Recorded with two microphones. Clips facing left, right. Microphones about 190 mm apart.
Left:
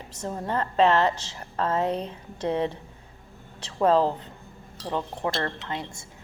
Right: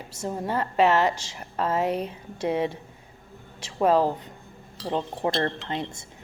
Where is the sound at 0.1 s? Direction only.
10° right (ahead or behind).